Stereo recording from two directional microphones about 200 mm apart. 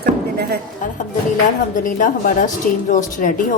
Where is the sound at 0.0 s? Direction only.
50° right (ahead or behind).